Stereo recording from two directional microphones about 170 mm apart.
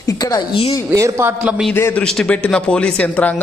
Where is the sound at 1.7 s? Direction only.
10° left (ahead or behind).